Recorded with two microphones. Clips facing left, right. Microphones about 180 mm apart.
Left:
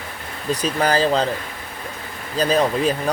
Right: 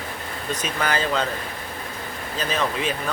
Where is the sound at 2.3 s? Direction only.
35° left (ahead or behind).